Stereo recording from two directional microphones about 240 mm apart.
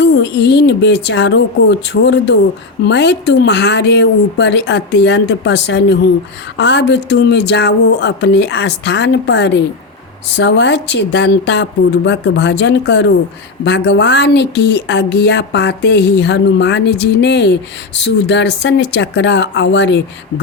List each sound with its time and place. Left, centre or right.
0.0 s speech: left